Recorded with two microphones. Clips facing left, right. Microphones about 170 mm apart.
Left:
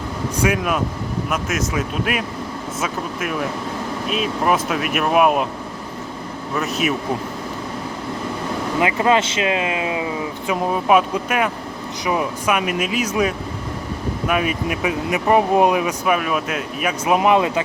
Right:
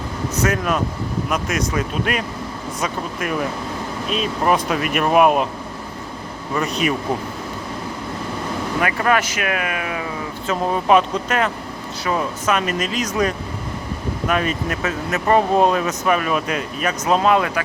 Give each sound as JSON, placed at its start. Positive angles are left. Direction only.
{"t": 0.4, "sound": "speech", "side_deg": 10}
{"t": 6.5, "sound": "speech", "side_deg": 0}
{"t": 8.8, "sound": "speech", "side_deg": 20}